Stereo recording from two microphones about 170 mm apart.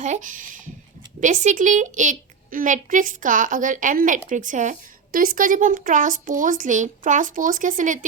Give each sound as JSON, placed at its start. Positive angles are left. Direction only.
{"t": 0.0, "sound": "a child's voice", "side_deg": -45}